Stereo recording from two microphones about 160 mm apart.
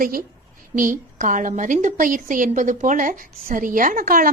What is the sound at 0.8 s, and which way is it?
A woman's voice, 55° right (ahead or behind).